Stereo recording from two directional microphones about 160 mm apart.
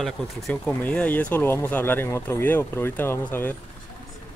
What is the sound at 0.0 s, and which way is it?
Speech, centre (ahead or behind).